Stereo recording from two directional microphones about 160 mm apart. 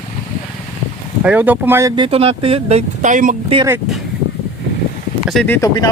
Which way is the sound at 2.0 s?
40° right (ahead or behind).